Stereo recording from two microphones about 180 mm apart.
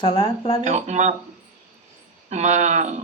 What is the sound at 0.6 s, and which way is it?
Speech, 40° right (ahead or behind).